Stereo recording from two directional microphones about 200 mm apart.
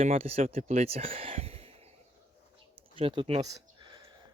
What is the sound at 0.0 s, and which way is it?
Speech, 30° right (ahead or behind).